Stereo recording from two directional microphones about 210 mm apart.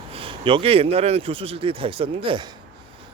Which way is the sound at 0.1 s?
25° right (ahead or behind).